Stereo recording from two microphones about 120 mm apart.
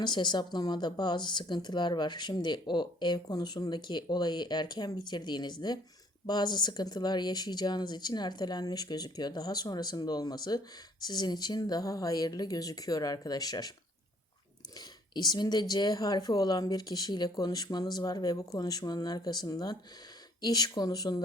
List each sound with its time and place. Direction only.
0.0 s speech: 40° left (ahead or behind)
14.8 s speech: 35° left (ahead or behind)